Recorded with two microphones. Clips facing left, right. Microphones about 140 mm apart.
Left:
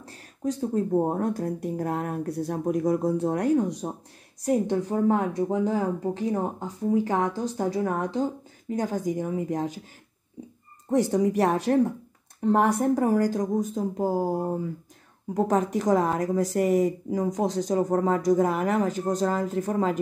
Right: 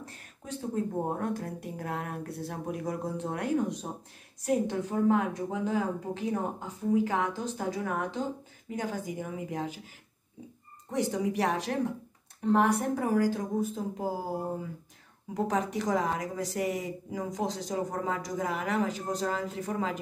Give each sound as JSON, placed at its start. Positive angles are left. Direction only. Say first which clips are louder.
{"t": 0.0, "sound": "speech", "louder": "left 14 dB", "side_deg": 35}
{"t": 10.9, "sound": "speech", "louder": "left 7 dB", "side_deg": 45}